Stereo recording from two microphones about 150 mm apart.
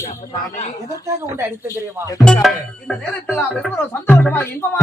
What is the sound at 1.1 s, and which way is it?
Speech, 15° right (ahead or behind).